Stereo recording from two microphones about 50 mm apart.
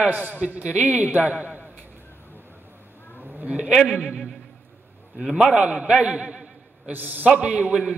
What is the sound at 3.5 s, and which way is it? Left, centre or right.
Speech, right.